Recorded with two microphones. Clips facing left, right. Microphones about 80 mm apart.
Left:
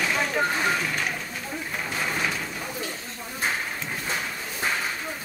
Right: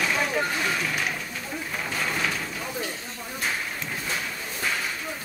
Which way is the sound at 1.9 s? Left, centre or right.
Centre.